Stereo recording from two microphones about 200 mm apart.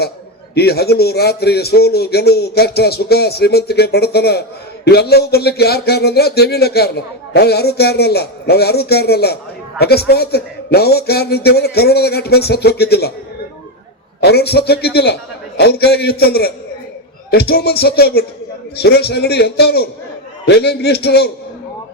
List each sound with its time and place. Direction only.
0.5 s speech: 55° left (ahead or behind)
14.2 s speech: 55° left (ahead or behind)